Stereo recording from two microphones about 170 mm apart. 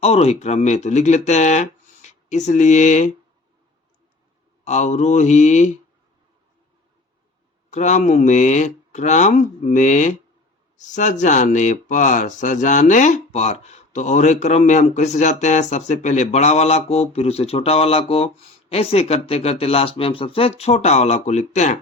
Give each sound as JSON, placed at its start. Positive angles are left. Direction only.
{"t": 0.0, "sound": "speech", "side_deg": 35}
{"t": 4.6, "sound": "speech", "side_deg": 45}
{"t": 7.7, "sound": "speech", "side_deg": 45}